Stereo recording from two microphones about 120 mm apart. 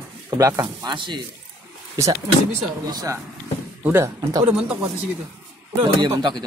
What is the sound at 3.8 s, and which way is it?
Speech, 20° right (ahead or behind).